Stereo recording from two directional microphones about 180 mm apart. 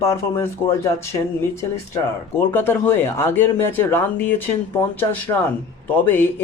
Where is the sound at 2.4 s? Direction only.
10° left (ahead or behind).